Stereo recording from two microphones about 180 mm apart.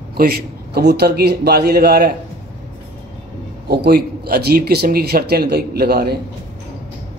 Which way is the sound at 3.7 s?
60° right (ahead or behind).